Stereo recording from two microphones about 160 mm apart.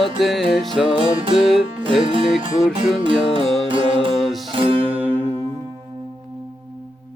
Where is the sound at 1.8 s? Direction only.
30° right (ahead or behind).